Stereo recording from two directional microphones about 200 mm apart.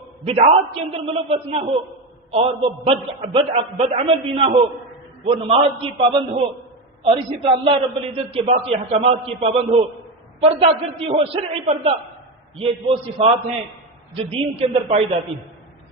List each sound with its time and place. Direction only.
0.3 s a man's voice: 30° right (ahead or behind)